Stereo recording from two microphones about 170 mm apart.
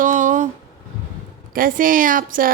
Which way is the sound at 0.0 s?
45° right (ahead or behind).